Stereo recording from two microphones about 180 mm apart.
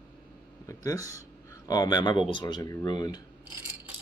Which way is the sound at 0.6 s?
15° left (ahead or behind).